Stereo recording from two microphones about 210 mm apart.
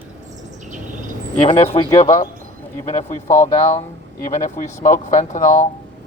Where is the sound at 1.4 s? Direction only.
30° left (ahead or behind).